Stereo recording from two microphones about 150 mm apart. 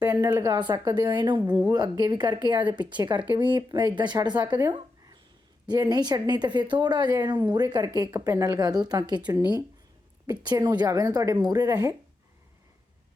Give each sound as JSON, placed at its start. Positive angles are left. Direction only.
{"t": 0.2, "sound": "a woman's voice", "side_deg": -25}
{"t": 5.6, "sound": "speech", "side_deg": -25}